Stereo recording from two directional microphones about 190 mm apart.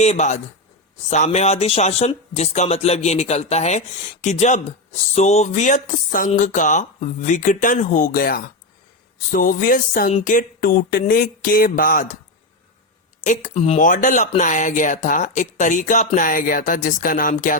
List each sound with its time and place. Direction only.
0.0 s speech: 35° left (ahead or behind)
13.2 s speech: 40° left (ahead or behind)